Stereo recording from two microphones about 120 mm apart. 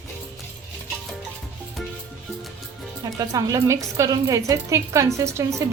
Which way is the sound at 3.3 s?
30° right (ahead or behind).